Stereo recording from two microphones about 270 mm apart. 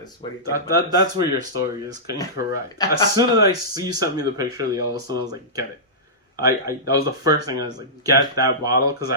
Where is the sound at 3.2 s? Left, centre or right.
Centre.